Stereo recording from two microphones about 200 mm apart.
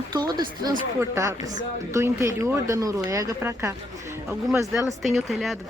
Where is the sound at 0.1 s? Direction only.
20° right (ahead or behind).